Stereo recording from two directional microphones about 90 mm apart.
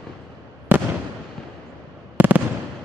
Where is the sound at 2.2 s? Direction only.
20° right (ahead or behind).